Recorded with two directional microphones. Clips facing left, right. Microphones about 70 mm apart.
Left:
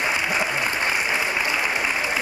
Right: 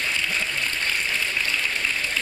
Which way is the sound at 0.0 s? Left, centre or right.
Centre.